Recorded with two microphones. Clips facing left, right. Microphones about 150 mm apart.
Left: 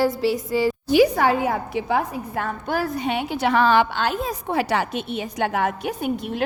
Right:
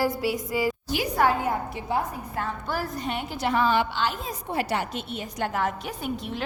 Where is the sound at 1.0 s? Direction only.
90° left.